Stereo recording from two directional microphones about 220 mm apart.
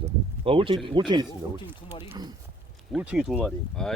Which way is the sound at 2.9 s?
5° right (ahead or behind).